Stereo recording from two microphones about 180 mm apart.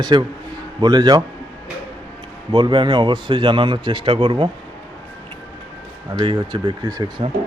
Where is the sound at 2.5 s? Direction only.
25° right (ahead or behind).